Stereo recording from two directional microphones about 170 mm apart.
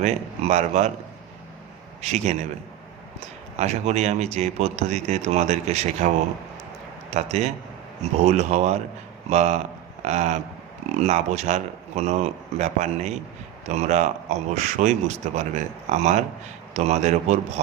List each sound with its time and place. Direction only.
0.0 s a man's voice: 40° right (ahead or behind)
2.0 s a man's voice: 40° right (ahead or behind)
3.6 s a man's voice: 40° right (ahead or behind)
7.1 s a man's voice: 40° right (ahead or behind)